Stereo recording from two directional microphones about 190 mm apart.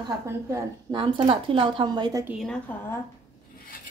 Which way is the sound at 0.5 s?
20° right (ahead or behind).